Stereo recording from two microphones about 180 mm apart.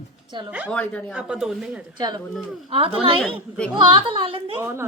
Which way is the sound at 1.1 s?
5° right (ahead or behind).